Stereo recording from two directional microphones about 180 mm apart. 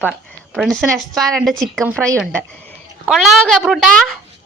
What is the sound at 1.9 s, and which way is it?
Speech, 15° right (ahead or behind).